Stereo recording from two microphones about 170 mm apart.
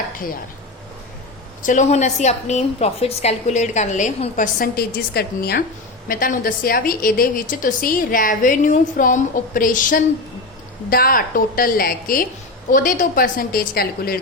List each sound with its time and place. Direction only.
1.6 s a woman's voice: 45° left (ahead or behind); by 14.2 s 65° left (ahead or behind)